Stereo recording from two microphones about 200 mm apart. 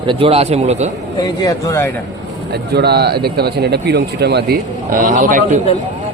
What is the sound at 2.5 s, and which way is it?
Speech, 55° right (ahead or behind).